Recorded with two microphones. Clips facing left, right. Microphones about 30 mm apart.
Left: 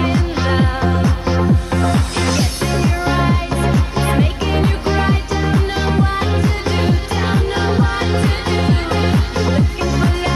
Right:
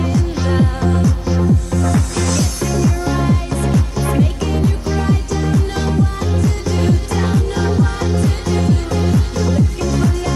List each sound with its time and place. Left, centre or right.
0.0 s music: left